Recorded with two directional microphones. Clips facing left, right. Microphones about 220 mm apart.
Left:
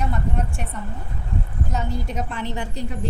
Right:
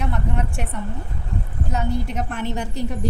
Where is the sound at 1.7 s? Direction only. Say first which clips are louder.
Right 4 dB; 60° right (ahead or behind).